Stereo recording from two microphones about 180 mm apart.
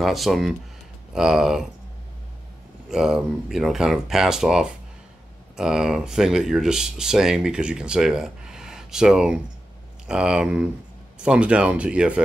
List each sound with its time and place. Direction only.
0.0 s speech: centre (ahead or behind)
2.9 s speech: 5° right (ahead or behind)